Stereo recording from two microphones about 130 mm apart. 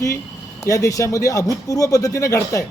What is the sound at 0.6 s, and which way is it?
Speech, 25° left (ahead or behind).